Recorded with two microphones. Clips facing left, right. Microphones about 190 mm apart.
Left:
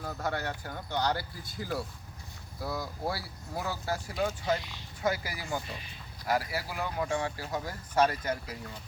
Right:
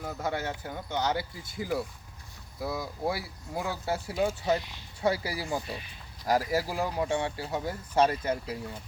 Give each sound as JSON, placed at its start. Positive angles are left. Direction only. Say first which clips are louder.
{"t": 0.0, "sound": "speech", "louder": "right 2 dB", "side_deg": -10}
{"t": 6.2, "sound": "speech", "louder": "right 4 dB", "side_deg": -40}